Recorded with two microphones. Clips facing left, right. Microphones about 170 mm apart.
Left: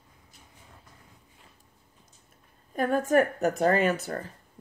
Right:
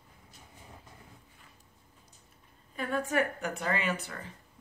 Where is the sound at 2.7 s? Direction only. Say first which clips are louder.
Left 8 dB; 45° left (ahead or behind).